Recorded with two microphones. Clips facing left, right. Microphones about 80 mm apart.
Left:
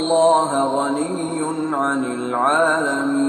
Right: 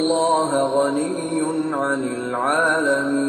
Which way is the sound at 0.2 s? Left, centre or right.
Left.